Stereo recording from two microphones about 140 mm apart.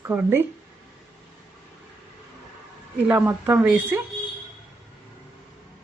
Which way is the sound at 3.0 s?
15° right (ahead or behind).